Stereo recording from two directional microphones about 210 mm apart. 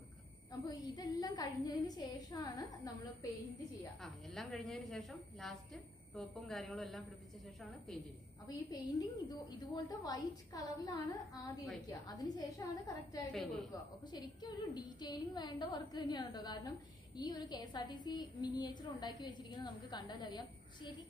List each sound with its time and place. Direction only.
0.5 s a woman's voice: 20° left (ahead or behind)
4.0 s a woman's voice: centre (ahead or behind)
8.5 s a woman's voice: 20° left (ahead or behind)
13.3 s a woman's voice: centre (ahead or behind)
13.7 s a woman's voice: 20° left (ahead or behind)